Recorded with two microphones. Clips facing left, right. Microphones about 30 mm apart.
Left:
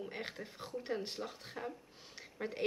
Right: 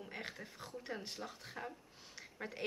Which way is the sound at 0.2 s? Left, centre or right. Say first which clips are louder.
Left 3 dB; centre.